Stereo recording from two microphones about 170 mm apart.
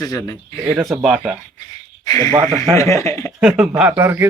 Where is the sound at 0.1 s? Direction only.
20° left (ahead or behind).